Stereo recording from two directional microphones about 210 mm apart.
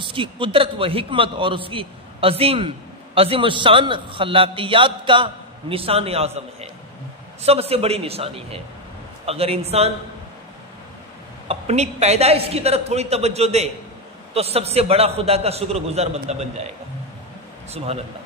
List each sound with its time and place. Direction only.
0.0 s a man's voice: 25° right (ahead or behind)
11.4 s a man's voice: 30° right (ahead or behind)